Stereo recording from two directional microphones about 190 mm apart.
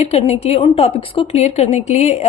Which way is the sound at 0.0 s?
35° left (ahead or behind).